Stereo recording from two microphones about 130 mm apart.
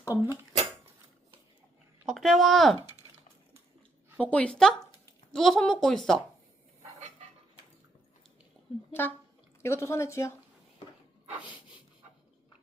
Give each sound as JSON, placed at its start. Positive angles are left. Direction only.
{"t": 0.1, "sound": "speech", "side_deg": -20}
{"t": 2.0, "sound": "speech", "side_deg": 0}
{"t": 4.2, "sound": "a woman's voice", "side_deg": 10}
{"t": 8.9, "sound": "speech", "side_deg": 15}